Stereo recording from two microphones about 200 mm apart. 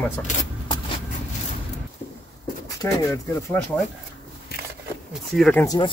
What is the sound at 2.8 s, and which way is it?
Speech, 15° left (ahead or behind).